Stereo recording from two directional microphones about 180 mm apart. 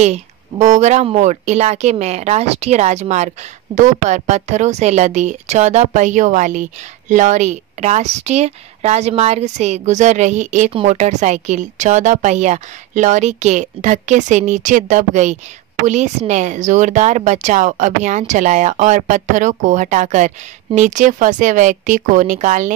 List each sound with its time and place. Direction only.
0.0 s a woman's voice: 40° right (ahead or behind)